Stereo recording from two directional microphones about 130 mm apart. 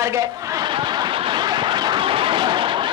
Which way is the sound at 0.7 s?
35° right (ahead or behind).